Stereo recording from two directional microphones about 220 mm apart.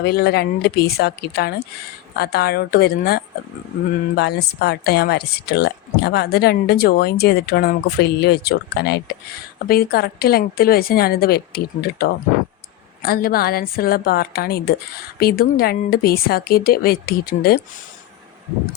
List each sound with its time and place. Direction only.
0.0 s speech: 45° left (ahead or behind)